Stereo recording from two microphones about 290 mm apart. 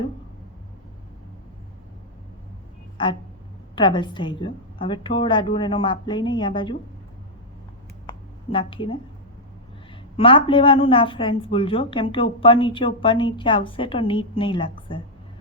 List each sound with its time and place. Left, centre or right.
3.0 s a woman's voice: centre
8.4 s a woman's voice: centre
10.2 s a woman's voice: centre